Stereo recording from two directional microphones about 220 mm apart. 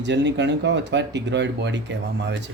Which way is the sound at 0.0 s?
55° right (ahead or behind).